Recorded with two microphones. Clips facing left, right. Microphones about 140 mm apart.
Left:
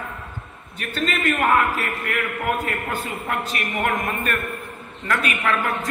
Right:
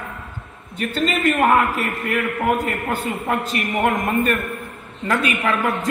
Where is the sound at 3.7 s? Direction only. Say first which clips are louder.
Right 5 dB; 30° right (ahead or behind).